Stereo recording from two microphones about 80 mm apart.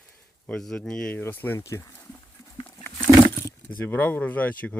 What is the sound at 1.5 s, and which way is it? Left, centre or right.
Speech, left.